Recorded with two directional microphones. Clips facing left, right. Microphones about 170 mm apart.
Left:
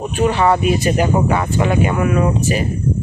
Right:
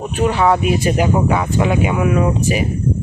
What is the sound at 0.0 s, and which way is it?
Speech, centre (ahead or behind).